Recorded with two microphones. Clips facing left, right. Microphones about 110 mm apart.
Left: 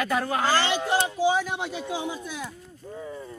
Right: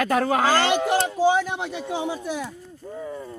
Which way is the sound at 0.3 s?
90° right.